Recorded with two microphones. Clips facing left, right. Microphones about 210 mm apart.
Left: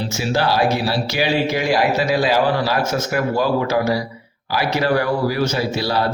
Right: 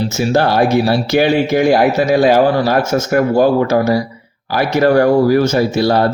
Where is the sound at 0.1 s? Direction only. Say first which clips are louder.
Right 4 dB; 50° right (ahead or behind).